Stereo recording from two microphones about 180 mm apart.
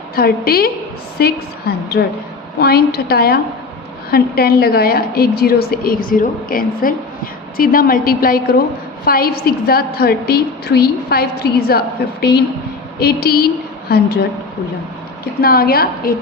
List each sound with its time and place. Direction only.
0.2 s a woman's voice: 55° left (ahead or behind)
15.2 s a woman's voice: 55° left (ahead or behind)